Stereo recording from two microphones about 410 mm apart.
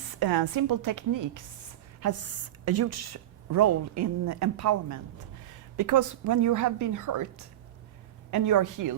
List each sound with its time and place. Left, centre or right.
0.1 s a woman's voice: right
2.0 s a woman's voice: right